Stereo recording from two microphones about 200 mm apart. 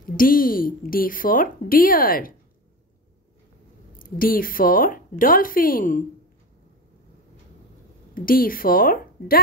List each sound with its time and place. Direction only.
0.0 s speech: 45° left (ahead or behind)
4.0 s speech: 45° left (ahead or behind)
8.1 s a woman's voice: 45° left (ahead or behind)